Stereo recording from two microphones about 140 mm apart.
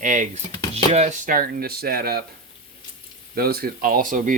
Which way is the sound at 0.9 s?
55° right (ahead or behind).